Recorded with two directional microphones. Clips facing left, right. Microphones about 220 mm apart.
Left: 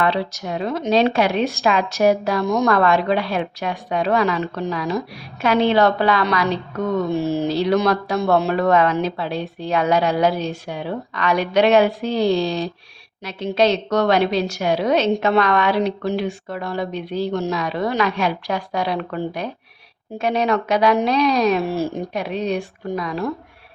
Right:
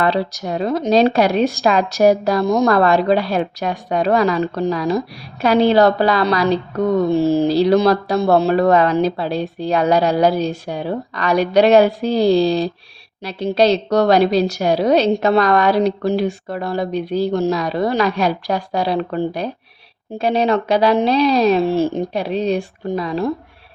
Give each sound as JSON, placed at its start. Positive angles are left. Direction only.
{"t": 0.0, "sound": "a woman's voice", "side_deg": -40}